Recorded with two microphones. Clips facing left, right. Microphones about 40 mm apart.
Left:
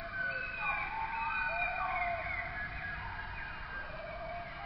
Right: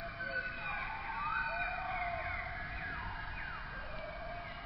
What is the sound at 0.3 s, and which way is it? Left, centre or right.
Emergency vehicle, centre.